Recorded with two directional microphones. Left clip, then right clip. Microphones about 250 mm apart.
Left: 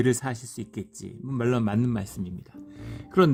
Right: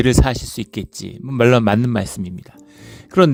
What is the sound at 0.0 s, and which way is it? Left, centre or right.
Speech, right.